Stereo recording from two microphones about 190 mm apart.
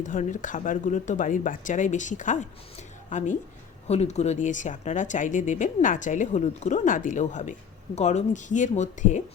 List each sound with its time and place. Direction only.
0.0 s speech: 40° left (ahead or behind)